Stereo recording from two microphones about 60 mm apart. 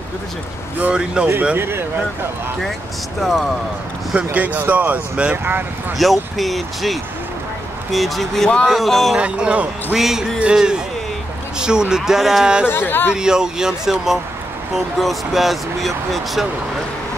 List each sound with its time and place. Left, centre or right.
0.9 s speech: centre
1.6 s speech: right
3.2 s speech: centre
4.1 s speech: right
5.4 s speech: right
6.0 s speech: centre
9.2 s speech: centre
9.9 s speech: centre
12.6 s speech: left
13.1 s speech: centre